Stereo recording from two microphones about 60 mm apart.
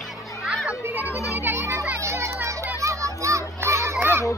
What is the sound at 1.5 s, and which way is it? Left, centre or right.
Children playing, right.